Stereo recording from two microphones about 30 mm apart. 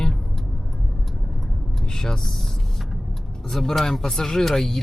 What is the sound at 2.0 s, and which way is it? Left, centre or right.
Speech, centre.